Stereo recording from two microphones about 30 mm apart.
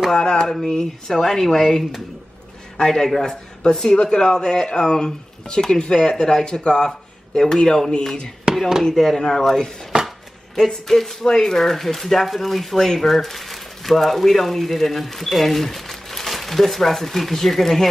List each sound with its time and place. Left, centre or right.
0.1 s speech: left
0.5 s speech: centre
2.9 s speech: centre
3.9 s speech: left
7.3 s speech: centre
8.5 s chop: right
8.9 s speech: centre
10.0 s chopping: centre
10.9 s speech: centre
12.7 s speech: centre
13.1 s speech: centre